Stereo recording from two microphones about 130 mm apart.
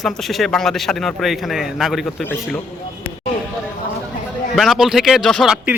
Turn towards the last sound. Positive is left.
turn(degrees=-10)  # may be behind; listen again after turning